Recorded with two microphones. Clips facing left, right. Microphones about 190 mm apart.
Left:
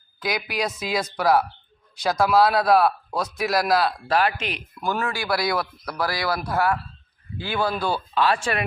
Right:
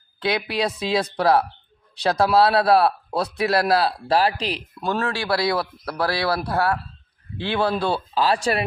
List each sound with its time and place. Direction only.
0.2 s a man's voice: 30° right (ahead or behind)